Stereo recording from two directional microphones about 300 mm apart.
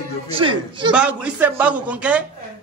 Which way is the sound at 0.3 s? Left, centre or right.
Centre.